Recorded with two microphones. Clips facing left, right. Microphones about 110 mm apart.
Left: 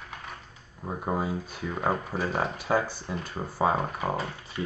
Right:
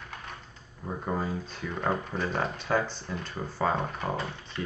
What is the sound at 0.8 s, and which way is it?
Speech, 15° left (ahead or behind).